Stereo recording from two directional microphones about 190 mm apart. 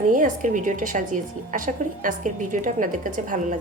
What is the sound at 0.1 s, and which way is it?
A woman's voice, 45° right (ahead or behind).